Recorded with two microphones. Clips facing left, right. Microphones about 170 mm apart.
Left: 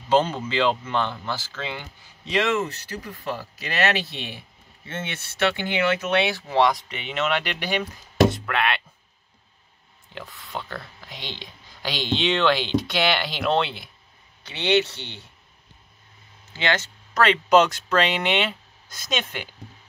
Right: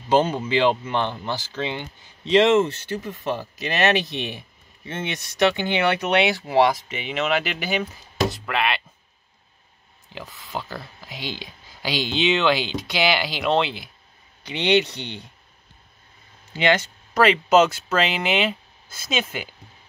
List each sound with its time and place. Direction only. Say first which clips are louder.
0.1 s speech: right 2 dB; 10° right (ahead or behind)
10.1 s speech: right 2 dB; centre (ahead or behind)
14.4 s speech: right 2 dB; 15° right (ahead or behind)
16.5 s speech: right 5 dB; 15° right (ahead or behind)